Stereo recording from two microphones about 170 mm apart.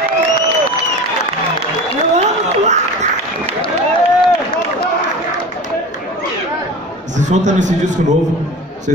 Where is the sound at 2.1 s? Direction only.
40° right (ahead or behind).